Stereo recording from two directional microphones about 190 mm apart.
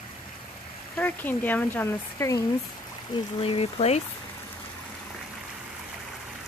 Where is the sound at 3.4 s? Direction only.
30° left (ahead or behind).